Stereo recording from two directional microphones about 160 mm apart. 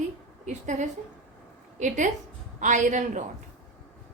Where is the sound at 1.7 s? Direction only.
50° right (ahead or behind).